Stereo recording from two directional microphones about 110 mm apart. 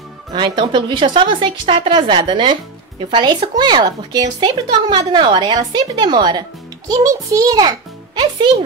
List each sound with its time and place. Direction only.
0.3 s a child's voice: 45° right (ahead or behind)